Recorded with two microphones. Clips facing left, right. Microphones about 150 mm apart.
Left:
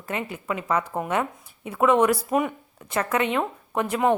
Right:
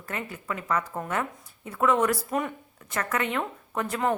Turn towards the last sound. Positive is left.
turn(degrees=15)  # may be behind; listen again after turning